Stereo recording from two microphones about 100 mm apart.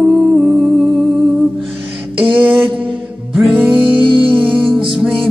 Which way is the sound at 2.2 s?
15° right (ahead or behind).